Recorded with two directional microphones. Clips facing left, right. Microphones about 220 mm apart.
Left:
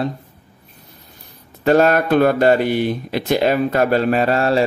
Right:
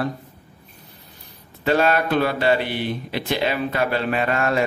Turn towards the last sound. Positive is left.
turn(degrees=35)  # may be behind; listen again after turning